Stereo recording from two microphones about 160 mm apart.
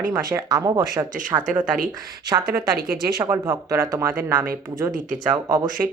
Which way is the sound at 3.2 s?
15° right (ahead or behind).